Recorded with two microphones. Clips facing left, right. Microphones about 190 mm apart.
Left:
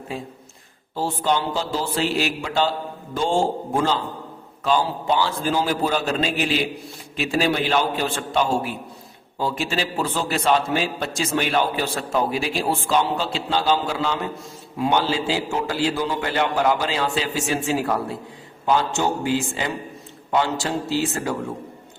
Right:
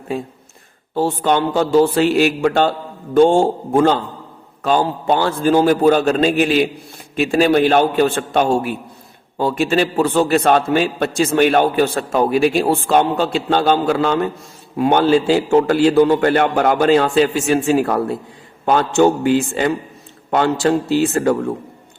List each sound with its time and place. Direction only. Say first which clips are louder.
0.9 s a man's voice: right 6 dB; 60° right (ahead or behind)